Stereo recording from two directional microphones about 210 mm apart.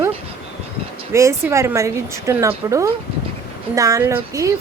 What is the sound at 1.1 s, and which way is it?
A woman's voice, 15° right (ahead or behind).